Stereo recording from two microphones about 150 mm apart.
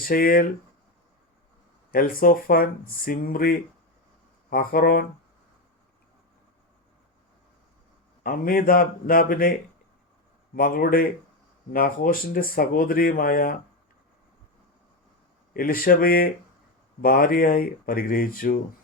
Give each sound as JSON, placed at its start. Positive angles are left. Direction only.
{"t": 0.0, "sound": "speech", "side_deg": 75}
{"t": 1.9, "sound": "speech", "side_deg": 70}
{"t": 8.2, "sound": "speech", "side_deg": 70}
{"t": 10.5, "sound": "speech", "side_deg": 75}
{"t": 15.5, "sound": "speech", "side_deg": 75}